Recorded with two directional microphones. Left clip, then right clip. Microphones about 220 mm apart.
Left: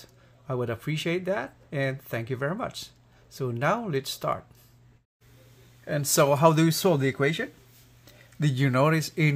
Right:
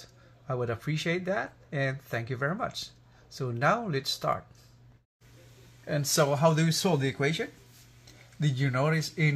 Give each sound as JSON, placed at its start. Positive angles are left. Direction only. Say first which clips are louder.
{"t": 0.5, "sound": "speech", "louder": "left 2 dB", "side_deg": 25}
{"t": 6.1, "sound": "speech", "louder": "left 5 dB", "side_deg": 35}